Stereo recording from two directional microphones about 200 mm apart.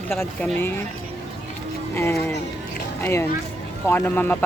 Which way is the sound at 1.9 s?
10° left (ahead or behind).